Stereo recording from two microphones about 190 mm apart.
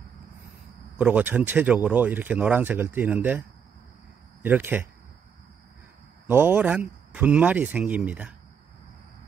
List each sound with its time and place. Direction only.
0.9 s speech: 10° right (ahead or behind)
6.2 s speech: 10° right (ahead or behind)